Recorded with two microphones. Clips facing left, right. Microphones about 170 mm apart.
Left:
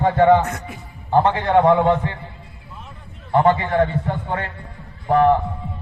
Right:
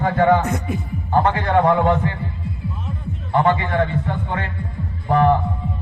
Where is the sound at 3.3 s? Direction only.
30° left (ahead or behind).